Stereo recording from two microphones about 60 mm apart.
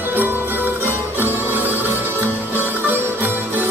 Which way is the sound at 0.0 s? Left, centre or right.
Right.